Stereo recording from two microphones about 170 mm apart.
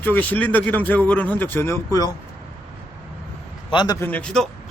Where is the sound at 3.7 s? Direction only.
25° left (ahead or behind).